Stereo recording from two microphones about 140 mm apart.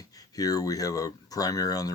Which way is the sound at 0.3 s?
25° left (ahead or behind).